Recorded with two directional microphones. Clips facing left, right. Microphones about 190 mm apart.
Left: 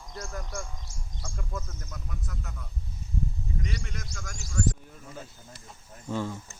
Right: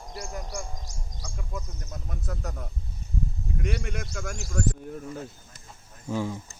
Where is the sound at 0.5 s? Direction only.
15° right (ahead or behind).